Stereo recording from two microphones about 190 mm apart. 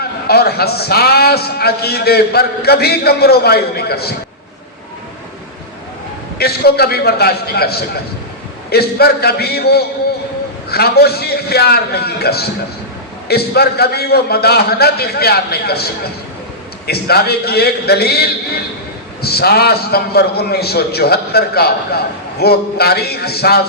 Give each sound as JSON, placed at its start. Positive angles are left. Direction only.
{"t": 0.3, "sound": "a man's voice", "side_deg": 55}
{"t": 6.4, "sound": "a man's voice", "side_deg": 55}